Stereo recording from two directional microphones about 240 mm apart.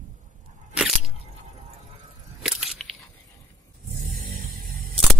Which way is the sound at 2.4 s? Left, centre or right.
Centre.